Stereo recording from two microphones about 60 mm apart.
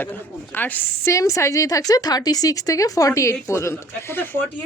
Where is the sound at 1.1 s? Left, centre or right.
Left.